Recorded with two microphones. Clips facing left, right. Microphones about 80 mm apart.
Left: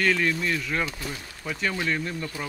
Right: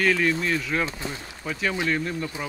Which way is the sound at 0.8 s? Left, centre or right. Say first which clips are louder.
Right 2 dB; right.